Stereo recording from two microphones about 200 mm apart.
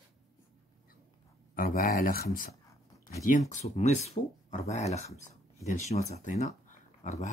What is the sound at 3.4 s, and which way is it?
Speech, 35° left (ahead or behind).